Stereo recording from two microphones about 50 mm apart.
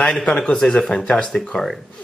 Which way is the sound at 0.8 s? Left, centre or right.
Centre.